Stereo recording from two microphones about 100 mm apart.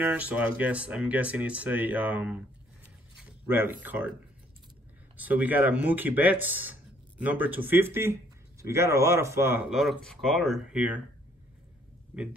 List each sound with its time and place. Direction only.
0.0 s speech: 15° right (ahead or behind)
3.4 s speech: 20° right (ahead or behind)
5.1 s speech: 15° right (ahead or behind)
9.7 s speech: 5° right (ahead or behind)
10.7 s speech: 15° right (ahead or behind)
12.1 s speech: 15° right (ahead or behind)